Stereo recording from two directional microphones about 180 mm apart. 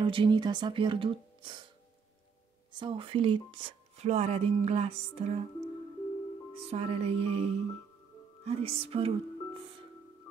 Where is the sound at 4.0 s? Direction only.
35° right (ahead or behind).